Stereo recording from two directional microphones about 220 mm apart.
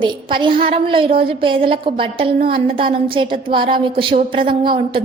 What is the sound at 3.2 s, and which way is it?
Speech, 20° right (ahead or behind).